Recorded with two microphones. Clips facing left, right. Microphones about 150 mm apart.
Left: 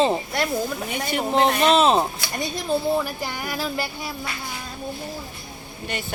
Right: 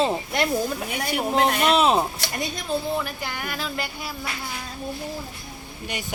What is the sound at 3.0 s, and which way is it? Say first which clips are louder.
Speech: left 2 dB; 10° left (ahead or behind).